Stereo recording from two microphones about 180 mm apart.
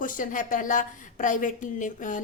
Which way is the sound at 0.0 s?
50° left (ahead or behind).